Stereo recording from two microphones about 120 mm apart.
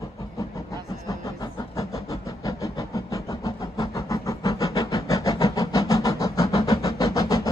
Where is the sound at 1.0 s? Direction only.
30° left (ahead or behind).